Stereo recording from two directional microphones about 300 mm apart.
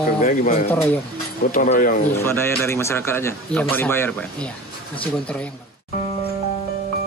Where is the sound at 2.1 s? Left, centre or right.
Centre.